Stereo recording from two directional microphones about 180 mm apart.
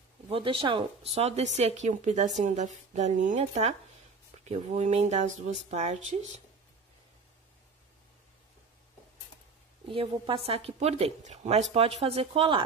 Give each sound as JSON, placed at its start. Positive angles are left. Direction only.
{"t": 0.3, "sound": "a woman's voice", "side_deg": -30}
{"t": 9.8, "sound": "a woman's voice", "side_deg": -30}